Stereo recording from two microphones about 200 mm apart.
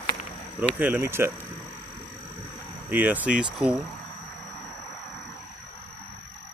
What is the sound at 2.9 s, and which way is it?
Speech, 10° right (ahead or behind).